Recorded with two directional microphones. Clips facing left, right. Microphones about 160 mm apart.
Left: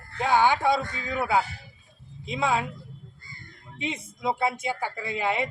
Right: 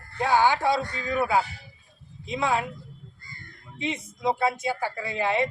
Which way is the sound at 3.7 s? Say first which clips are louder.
Right 2 dB; 20° left (ahead or behind).